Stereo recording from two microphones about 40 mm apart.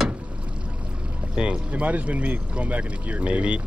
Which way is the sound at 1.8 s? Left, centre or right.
Right.